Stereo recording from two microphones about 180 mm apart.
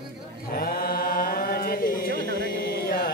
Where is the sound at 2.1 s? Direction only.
65° right (ahead or behind).